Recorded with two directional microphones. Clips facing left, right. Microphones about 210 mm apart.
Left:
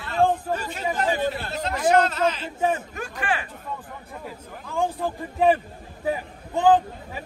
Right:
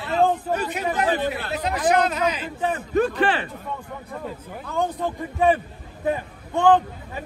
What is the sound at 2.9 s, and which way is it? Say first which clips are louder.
Speech: right 9 dB; 35° right (ahead or behind).